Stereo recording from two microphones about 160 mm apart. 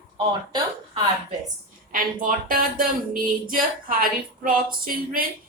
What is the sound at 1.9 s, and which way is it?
Speech, 60° right (ahead or behind).